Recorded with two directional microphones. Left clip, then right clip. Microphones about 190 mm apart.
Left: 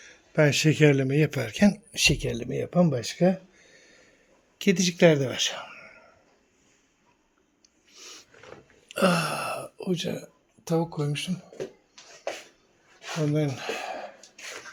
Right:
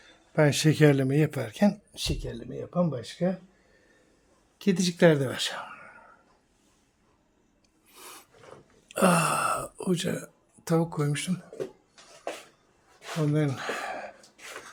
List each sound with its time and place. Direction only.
0.0 s speech: centre (ahead or behind)
1.9 s speech: 25° left (ahead or behind)
4.5 s speech: centre (ahead or behind)
7.9 s a sound: 20° right (ahead or behind)
8.9 s speech: 10° right (ahead or behind)
13.3 s a sound: 10° right (ahead or behind)